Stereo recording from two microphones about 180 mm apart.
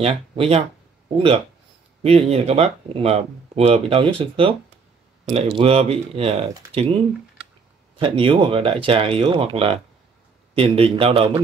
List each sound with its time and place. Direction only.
0.0 s speech: 35° right (ahead or behind)
8.0 s speech: 30° right (ahead or behind)